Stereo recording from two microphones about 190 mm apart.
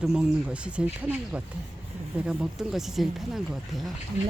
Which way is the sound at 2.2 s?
5° right (ahead or behind).